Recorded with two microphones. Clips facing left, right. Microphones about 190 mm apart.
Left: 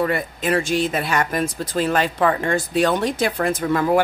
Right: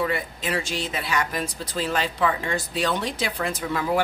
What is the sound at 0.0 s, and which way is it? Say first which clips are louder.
Speech: left 5 dB; 50° left (ahead or behind).